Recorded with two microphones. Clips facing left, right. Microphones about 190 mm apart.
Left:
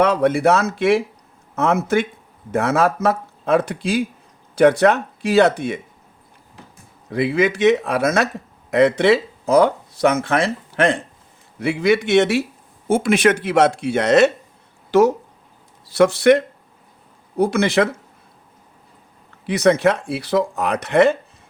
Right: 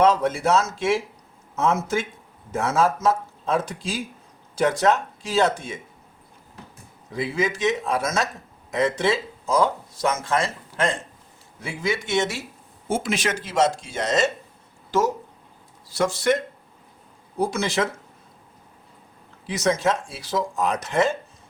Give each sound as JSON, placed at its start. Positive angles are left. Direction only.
{"t": 0.0, "sound": "speech", "side_deg": 60}
{"t": 7.1, "sound": "speech", "side_deg": 65}
{"t": 14.8, "sound": "a sound", "side_deg": 65}
{"t": 15.9, "sound": "speech", "side_deg": 65}
{"t": 19.5, "sound": "speech", "side_deg": 60}